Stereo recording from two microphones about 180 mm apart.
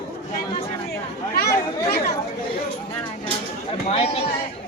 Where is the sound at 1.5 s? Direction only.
60° left (ahead or behind).